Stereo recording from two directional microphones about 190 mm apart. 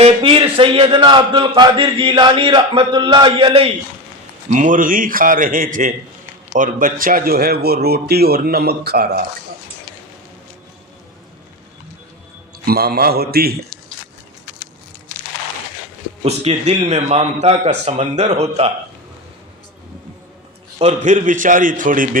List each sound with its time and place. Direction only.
0.0 s speech: 30° right (ahead or behind)
4.4 s a man's voice: 40° right (ahead or behind)
12.6 s a man's voice: 55° right (ahead or behind)
16.2 s a man's voice: 35° right (ahead or behind)
20.7 s a man's voice: 35° right (ahead or behind)